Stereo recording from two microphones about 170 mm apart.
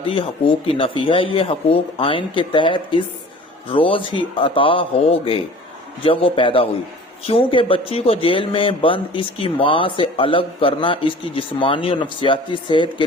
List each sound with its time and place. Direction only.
0.7 s a man's voice: 30° left (ahead or behind)